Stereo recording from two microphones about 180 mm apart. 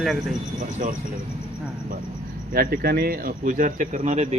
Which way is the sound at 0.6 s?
45° right (ahead or behind).